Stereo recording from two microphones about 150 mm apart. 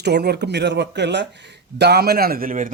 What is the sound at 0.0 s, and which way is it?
Speech, 90° right.